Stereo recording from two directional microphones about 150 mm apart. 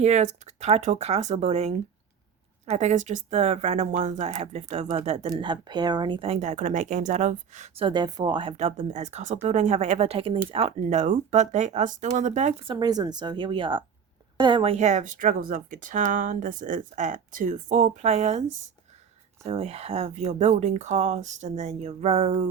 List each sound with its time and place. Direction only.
0.0 s speech: 50° right (ahead or behind)
5.2 s a woman's voice: 30° right (ahead or behind); by 7.9 s 50° right (ahead or behind)
7.9 s speech: 30° right (ahead or behind)
8.5 s speech: 45° right (ahead or behind)
12.6 s a woman's voice: 30° right (ahead or behind); by 18.4 s 45° right (ahead or behind)
19.5 s speech: 45° right (ahead or behind)